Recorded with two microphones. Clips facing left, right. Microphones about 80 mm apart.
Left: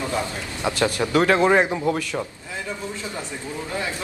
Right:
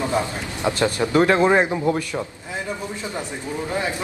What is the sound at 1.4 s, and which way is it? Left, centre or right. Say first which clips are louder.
Speech: right 1 dB; centre.